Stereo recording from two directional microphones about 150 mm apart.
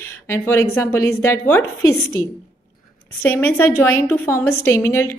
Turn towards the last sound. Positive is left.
turn(degrees=15)  # may be behind; listen again after turning